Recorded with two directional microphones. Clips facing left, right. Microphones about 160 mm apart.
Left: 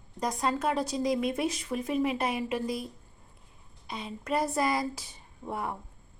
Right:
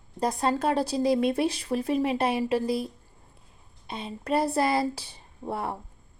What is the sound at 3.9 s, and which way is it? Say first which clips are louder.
Speech: right 4 dB; 30° right (ahead or behind).